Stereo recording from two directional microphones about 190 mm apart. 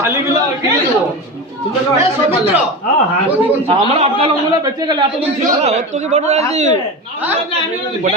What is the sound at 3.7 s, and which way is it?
A man's voice, 30° right (ahead or behind).